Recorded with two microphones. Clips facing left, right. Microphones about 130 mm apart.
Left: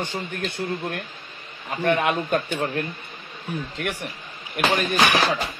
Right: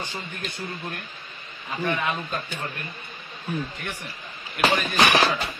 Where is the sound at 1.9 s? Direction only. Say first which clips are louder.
Left 7 dB; 60° left (ahead or behind).